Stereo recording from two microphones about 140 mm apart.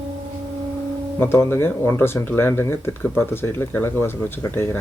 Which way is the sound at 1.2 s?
15° left (ahead or behind).